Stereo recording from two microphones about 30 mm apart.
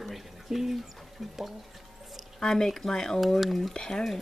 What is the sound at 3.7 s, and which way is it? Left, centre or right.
Speech, left.